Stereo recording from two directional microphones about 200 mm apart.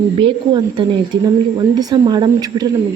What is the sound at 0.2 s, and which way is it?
A woman's voice, 25° right (ahead or behind).